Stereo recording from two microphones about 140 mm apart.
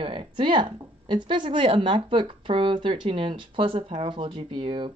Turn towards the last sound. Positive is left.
turn(degrees=-35)  # may be behind; listen again after turning